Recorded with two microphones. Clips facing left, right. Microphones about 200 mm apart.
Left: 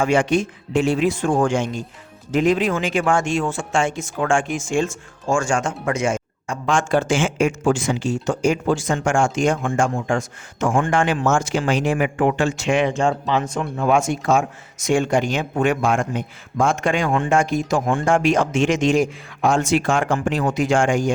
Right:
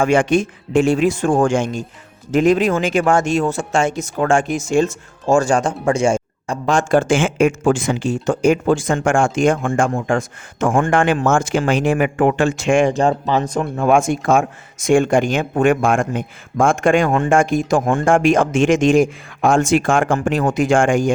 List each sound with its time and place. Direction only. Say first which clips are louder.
0.0 s speech: right 3 dB; 50° right (ahead or behind)